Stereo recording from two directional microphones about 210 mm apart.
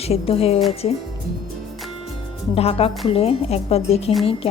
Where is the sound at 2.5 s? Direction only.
25° left (ahead or behind).